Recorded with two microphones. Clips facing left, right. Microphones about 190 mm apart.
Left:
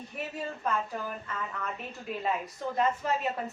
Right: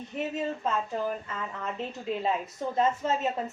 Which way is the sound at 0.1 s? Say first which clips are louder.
Right 6 dB; 20° right (ahead or behind).